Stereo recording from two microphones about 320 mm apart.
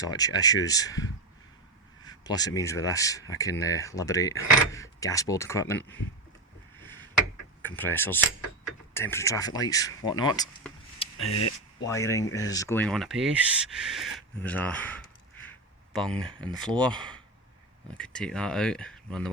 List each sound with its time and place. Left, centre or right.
0.0 s speech: centre
2.0 s speech: centre
7.6 s speech: centre
11.2 s speech: left
11.9 s speech: centre
15.4 s a sound: centre
16.8 s speech: centre